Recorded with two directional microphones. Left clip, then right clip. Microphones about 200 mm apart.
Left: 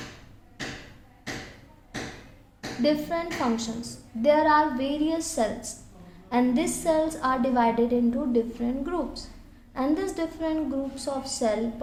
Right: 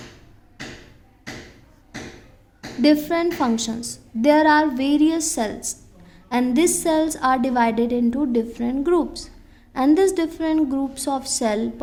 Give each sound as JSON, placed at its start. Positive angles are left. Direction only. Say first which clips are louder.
{"t": 2.8, "sound": "a woman's voice", "louder": "right 7 dB", "side_deg": -45}